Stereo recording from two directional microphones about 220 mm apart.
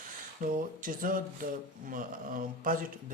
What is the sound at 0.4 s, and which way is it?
Speech, 35° right (ahead or behind).